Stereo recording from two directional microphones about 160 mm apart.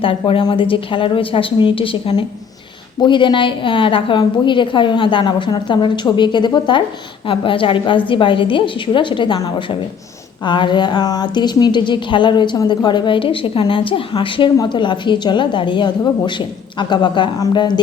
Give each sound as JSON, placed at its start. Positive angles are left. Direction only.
{"t": 0.0, "sound": "a woman's voice", "side_deg": 35}